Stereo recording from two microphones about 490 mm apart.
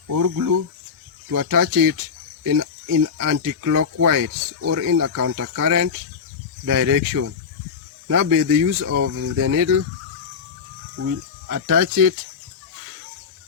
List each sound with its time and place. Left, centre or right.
0.1 s speech: right
11.4 s speech: right